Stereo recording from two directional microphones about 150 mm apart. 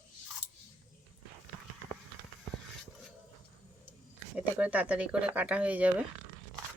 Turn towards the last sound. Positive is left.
turn(degrees=-10)  # may be behind; listen again after turning